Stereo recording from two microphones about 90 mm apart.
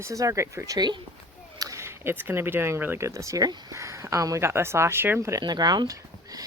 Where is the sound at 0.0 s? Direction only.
35° right (ahead or behind).